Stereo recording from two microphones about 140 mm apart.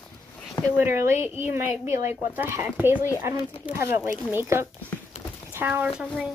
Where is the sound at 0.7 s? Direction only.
15° right (ahead or behind).